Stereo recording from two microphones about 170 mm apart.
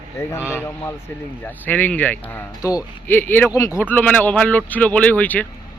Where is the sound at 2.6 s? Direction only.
20° left (ahead or behind).